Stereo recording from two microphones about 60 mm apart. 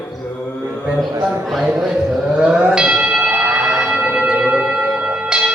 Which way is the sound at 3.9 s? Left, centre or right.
Centre.